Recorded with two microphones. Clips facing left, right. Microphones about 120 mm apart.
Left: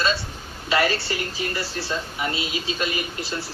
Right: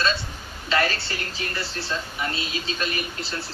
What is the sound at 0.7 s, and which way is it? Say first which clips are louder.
Speech: left 2 dB; 15° left (ahead or behind).